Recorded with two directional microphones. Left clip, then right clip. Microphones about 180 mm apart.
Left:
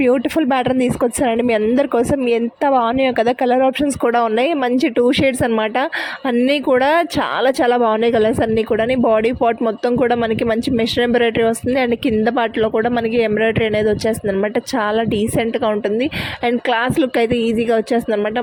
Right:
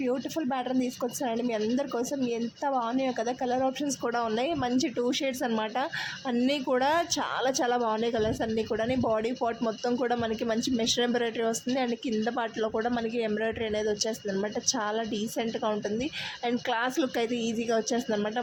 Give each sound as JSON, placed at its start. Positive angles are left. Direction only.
{"t": 0.0, "sound": "speech", "side_deg": 50}